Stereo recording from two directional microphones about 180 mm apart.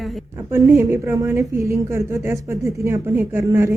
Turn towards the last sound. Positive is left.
turn(degrees=-15)  # may be behind; listen again after turning